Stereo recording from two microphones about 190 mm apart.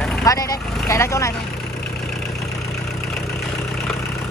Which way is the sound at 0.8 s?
15° left (ahead or behind).